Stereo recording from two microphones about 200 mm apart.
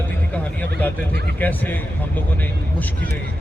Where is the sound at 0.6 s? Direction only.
10° left (ahead or behind).